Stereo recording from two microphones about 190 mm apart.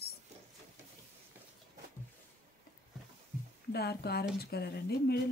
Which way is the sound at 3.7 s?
55° left (ahead or behind).